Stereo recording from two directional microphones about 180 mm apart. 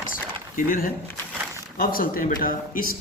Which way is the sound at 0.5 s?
50° left (ahead or behind).